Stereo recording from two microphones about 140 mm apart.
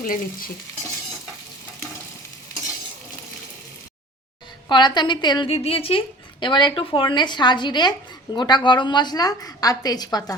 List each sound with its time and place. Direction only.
0.0 s stir: 85° left
4.7 s speech: 30° left (ahead or behind)
5.5 s a woman's voice: 45° left (ahead or behind); by 10.3 s 30° left (ahead or behind)